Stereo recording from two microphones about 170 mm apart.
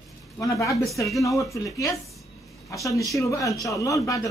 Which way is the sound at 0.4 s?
20° left (ahead or behind).